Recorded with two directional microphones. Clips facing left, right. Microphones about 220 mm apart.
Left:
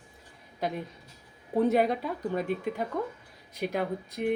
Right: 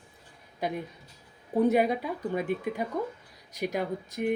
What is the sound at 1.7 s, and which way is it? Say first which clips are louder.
A woman's voice: even; 5° right (ahead or behind).